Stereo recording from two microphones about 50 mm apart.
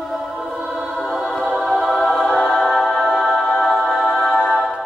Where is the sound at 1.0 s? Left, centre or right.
Centre.